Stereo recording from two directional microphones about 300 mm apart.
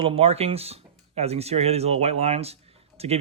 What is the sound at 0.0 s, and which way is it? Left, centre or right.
Speech, centre.